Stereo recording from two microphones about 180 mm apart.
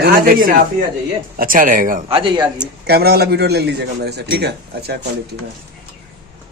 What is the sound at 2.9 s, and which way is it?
A man's voice, 60° right (ahead or behind).